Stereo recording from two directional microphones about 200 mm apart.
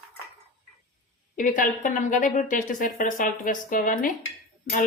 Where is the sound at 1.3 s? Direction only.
40° left (ahead or behind).